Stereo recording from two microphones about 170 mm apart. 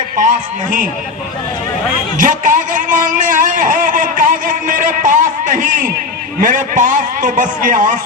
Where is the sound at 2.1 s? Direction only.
50° right (ahead or behind).